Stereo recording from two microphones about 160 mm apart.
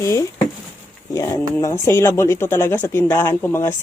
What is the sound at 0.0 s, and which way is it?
Speech, 20° left (ahead or behind).